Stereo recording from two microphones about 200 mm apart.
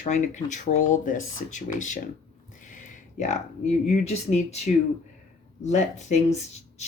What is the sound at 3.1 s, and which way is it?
Speech, 35° left (ahead or behind).